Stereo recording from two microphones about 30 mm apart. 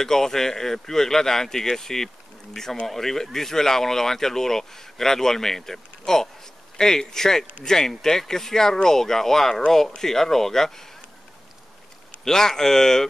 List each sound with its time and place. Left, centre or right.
0.0 s speech: centre
12.3 s speech: centre